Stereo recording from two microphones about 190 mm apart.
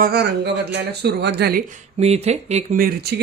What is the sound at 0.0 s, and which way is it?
Speech, 60° right (ahead or behind).